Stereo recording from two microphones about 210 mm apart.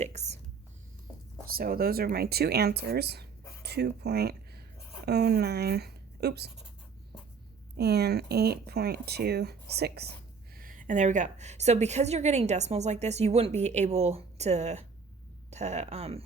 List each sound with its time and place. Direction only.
0.0 s speech: 30° right (ahead or behind)
1.5 s speech: 45° right (ahead or behind)
7.8 s speech: 50° right (ahead or behind); by 16.2 s 30° right (ahead or behind)